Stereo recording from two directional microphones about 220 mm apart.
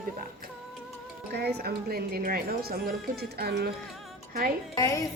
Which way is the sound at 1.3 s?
45° right (ahead or behind).